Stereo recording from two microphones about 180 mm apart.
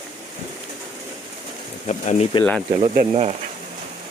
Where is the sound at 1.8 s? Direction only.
40° left (ahead or behind).